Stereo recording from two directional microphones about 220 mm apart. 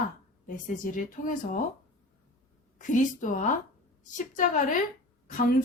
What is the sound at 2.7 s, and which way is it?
Speech, 35° left (ahead or behind).